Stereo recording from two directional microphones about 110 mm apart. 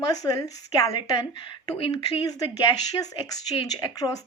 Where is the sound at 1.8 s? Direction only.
55° left (ahead or behind).